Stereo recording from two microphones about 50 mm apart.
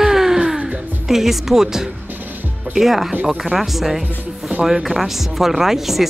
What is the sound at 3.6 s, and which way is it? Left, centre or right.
Speech, centre.